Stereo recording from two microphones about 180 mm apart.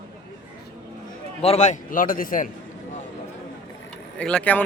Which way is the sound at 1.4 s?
35° left (ahead or behind).